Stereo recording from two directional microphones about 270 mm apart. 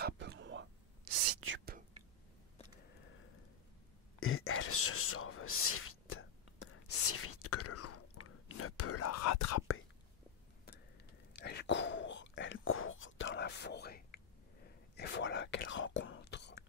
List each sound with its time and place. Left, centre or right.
0.0 s whispering: right
4.2 s a sound: left
6.6 s whispering: left
11.4 s whispering: left